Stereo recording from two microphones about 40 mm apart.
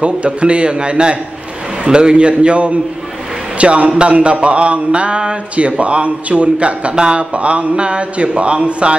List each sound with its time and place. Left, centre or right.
0.0 s a man's voice: right